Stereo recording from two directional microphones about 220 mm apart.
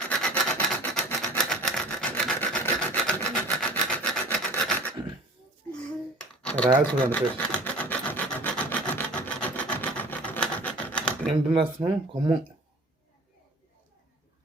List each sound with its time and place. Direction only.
0.1 s rub: 5° left (ahead or behind)
6.1 s typing: 5° left (ahead or behind)
6.9 s rub: 5° left (ahead or behind)
11.5 s speech: 20° right (ahead or behind)